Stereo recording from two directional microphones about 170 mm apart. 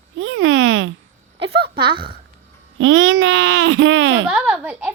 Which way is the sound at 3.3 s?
90° right.